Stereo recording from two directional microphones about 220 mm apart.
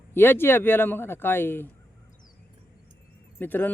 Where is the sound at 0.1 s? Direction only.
10° left (ahead or behind).